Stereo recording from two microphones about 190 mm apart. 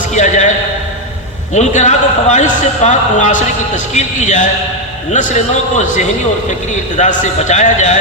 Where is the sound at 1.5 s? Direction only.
40° left (ahead or behind).